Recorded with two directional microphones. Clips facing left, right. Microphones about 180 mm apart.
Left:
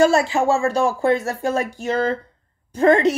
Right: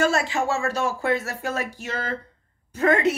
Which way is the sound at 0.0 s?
30° left (ahead or behind).